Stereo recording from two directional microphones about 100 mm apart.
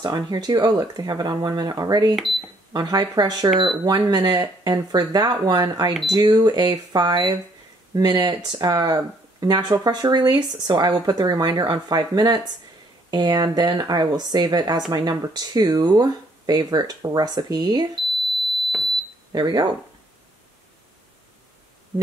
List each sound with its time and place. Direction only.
0.0 s speech: 45° right (ahead or behind)
19.3 s speech: 45° right (ahead or behind)